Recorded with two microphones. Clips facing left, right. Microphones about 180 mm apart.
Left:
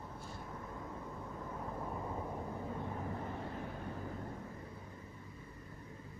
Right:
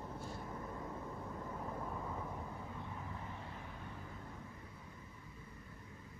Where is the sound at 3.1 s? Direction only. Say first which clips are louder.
Left 7 dB; 45° left (ahead or behind).